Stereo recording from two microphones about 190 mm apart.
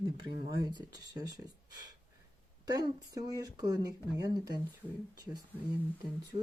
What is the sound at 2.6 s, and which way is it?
Speech, 20° right (ahead or behind).